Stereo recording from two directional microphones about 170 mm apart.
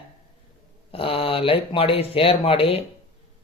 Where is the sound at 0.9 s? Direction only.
35° left (ahead or behind).